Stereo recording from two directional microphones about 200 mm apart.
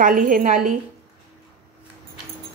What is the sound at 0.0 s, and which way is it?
Speech, 40° right (ahead or behind).